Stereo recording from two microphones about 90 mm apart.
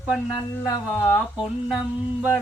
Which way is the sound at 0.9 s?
20° left (ahead or behind).